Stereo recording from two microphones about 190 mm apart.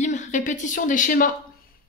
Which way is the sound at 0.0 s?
40° left (ahead or behind).